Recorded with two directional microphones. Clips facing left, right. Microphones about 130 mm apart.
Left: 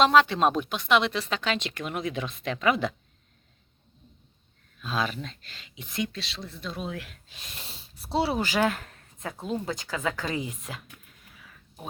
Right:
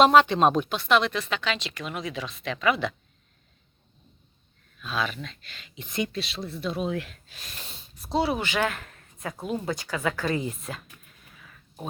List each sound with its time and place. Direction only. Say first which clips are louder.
0.0 s speech: right 3 dB; 5° right (ahead or behind); by 1.1 s 15° left (ahead or behind)
1.1 s speech: even; 35° left (ahead or behind)
4.8 s speech: even; 35° left (ahead or behind)
5.7 s speech: right 2 dB; 5° left (ahead or behind)
6.6 s speech: right 6 dB; 10° right (ahead or behind)
6.9 s a woman's voice: right 7 dB; 10° left (ahead or behind)
7.3 s speech: right 1 dB; 25° left (ahead or behind)
8.5 s a sound: left 2 dB; 5° left (ahead or behind)
9.4 s speech: right 1 dB; 15° right (ahead or behind)
9.8 s a woman's voice: right 3 dB; 15° left (ahead or behind)